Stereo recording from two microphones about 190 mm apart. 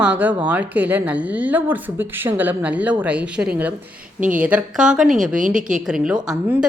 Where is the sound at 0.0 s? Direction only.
5° right (ahead or behind).